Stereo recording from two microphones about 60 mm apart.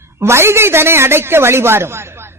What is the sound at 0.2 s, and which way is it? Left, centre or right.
A man's voice, right.